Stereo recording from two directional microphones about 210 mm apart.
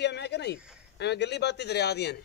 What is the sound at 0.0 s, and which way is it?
A man's voice, 55° left (ahead or behind).